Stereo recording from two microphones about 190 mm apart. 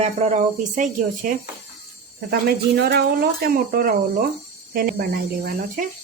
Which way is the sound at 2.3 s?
55° right (ahead or behind).